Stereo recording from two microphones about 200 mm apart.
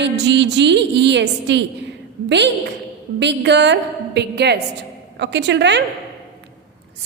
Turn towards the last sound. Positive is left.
turn(degrees=-60)  # may be behind; listen again after turning